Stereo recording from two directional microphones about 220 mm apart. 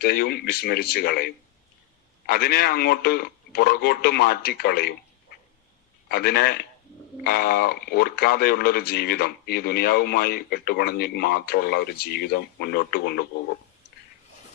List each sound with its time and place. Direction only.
0.0 s speech: 45° left (ahead or behind)
6.1 s speech: 45° left (ahead or behind)